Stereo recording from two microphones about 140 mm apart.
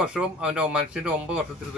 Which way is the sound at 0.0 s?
5° right (ahead or behind).